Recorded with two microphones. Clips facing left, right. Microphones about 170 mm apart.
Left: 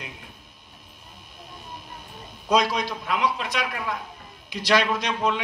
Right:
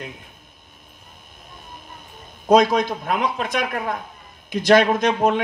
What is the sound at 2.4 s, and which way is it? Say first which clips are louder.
A man's voice: right 7 dB; 50° right (ahead or behind).